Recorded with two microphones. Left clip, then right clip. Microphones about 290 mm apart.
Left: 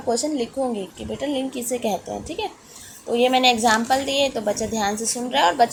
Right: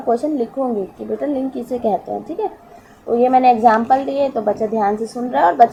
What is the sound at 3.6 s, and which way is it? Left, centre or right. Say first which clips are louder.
A woman's voice: right 6 dB; left.